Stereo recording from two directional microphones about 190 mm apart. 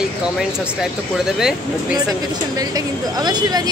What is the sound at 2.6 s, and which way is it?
A woman's voice, 20° right (ahead or behind).